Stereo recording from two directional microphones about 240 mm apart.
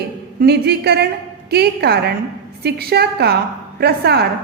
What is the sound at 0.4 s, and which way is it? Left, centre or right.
A woman's voice, right.